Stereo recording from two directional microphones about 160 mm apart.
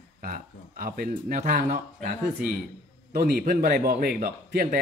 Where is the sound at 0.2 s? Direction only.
60° right (ahead or behind).